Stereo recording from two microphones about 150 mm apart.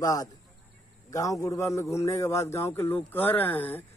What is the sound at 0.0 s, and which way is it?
A man's voice, 25° left (ahead or behind).